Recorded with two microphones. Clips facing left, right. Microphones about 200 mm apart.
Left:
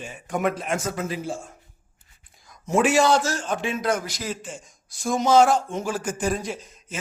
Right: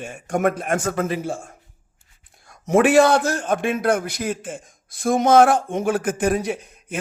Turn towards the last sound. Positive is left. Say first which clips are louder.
# right 6 dB
turn(degrees=-60)  # may be behind; listen again after turning